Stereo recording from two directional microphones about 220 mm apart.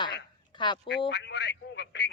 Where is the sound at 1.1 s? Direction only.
50° left (ahead or behind).